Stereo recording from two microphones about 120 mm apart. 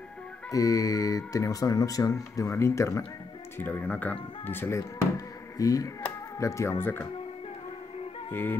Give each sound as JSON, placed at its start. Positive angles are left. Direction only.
{"t": 0.5, "sound": "speech", "side_deg": 30}
{"t": 3.5, "sound": "speech", "side_deg": 10}
{"t": 8.3, "sound": "music", "side_deg": 15}